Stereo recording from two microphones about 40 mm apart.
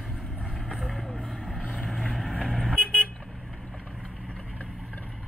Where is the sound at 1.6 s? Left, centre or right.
Left.